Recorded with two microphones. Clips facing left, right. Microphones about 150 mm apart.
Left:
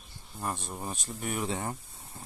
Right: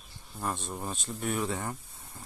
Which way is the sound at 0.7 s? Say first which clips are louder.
Right 1 dB; 10° left (ahead or behind).